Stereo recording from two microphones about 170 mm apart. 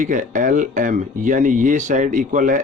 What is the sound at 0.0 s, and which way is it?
Speech, 50° right (ahead or behind).